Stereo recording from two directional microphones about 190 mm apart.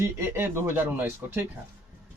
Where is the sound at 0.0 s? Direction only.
15° right (ahead or behind).